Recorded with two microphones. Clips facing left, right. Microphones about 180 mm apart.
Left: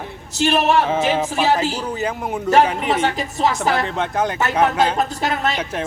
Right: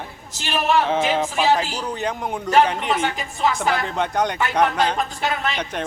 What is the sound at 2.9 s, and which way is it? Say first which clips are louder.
Speech: left 3 dB; 40° left (ahead or behind).